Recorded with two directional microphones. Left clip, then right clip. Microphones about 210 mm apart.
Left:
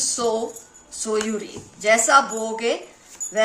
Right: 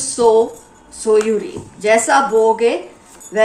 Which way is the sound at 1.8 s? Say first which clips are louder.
Right 3 dB; 45° left (ahead or behind).